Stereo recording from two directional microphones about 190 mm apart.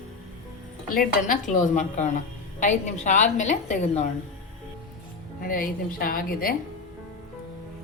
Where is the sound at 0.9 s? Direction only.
45° left (ahead or behind).